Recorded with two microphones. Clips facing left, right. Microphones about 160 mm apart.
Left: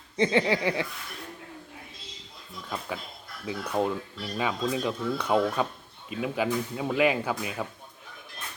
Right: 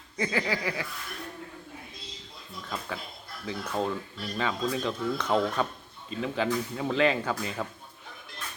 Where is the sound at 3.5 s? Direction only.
15° left (ahead or behind).